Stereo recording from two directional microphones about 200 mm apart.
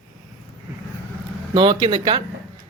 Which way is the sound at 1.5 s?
25° right (ahead or behind).